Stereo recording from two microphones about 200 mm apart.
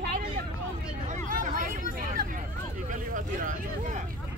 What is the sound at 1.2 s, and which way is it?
Hubbub, 40° right (ahead or behind).